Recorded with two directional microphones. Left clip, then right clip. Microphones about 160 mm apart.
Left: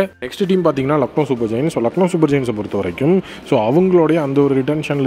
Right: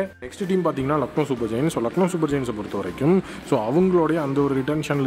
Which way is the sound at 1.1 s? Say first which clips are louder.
Left 6 dB; 25° left (ahead or behind).